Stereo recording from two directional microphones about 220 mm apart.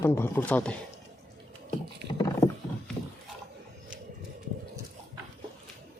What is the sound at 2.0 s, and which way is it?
Horse, 50° right (ahead or behind).